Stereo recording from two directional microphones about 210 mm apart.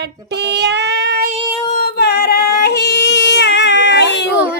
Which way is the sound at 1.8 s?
50° left (ahead or behind).